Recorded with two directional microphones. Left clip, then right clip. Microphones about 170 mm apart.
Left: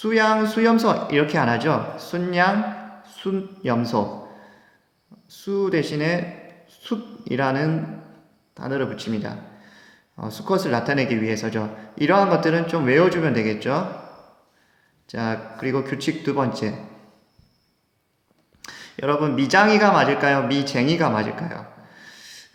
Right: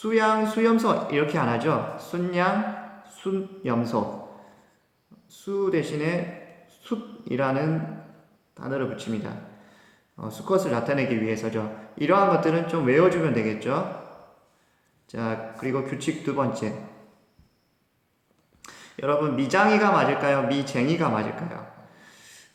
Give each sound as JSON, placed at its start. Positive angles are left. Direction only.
{"t": 0.0, "sound": "speech", "side_deg": 40}
{"t": 5.4, "sound": "speech", "side_deg": 40}
{"t": 15.1, "sound": "speech", "side_deg": 40}
{"t": 18.6, "sound": "speech", "side_deg": 40}